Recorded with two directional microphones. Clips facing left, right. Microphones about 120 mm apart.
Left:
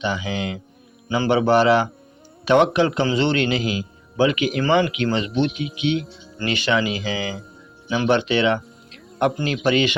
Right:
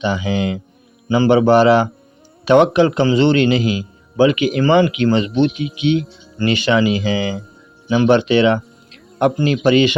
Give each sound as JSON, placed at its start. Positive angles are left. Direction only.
{"t": 0.0, "sound": "a man's voice", "side_deg": -30}
{"t": 5.5, "sound": "speech", "side_deg": 0}
{"t": 6.4, "sound": "a man's voice", "side_deg": -20}